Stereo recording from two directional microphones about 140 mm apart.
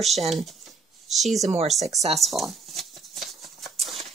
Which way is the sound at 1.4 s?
50° right (ahead or behind).